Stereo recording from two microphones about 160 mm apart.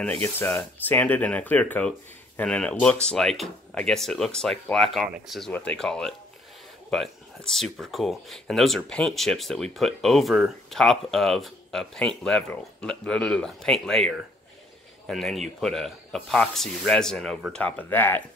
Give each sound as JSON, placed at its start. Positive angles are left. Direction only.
{"t": 0.0, "sound": "speech", "side_deg": 10}